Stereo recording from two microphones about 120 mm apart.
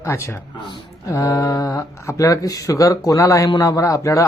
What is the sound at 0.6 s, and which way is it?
Speech, 40° left (ahead or behind).